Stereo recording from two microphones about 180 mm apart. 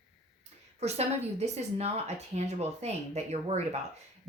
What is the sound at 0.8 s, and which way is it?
A woman's voice, 35° right (ahead or behind).